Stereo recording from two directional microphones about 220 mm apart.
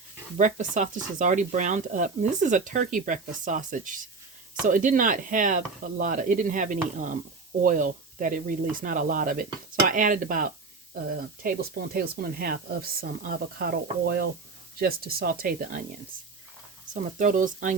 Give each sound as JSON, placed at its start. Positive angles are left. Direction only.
{"t": 0.3, "sound": "speech", "side_deg": -35}
{"t": 16.9, "sound": "speech", "side_deg": -35}